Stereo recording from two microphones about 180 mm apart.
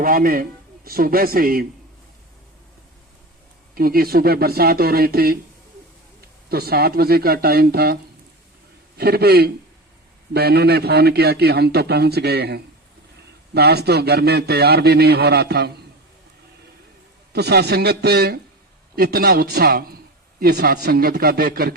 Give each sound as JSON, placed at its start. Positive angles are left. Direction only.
{"t": 0.0, "sound": "a man's voice", "side_deg": -50}
{"t": 3.8, "sound": "a man's voice", "side_deg": -55}
{"t": 6.5, "sound": "a man's voice", "side_deg": -60}
{"t": 9.0, "sound": "a man's voice", "side_deg": -60}
{"t": 17.3, "sound": "a man's voice", "side_deg": -65}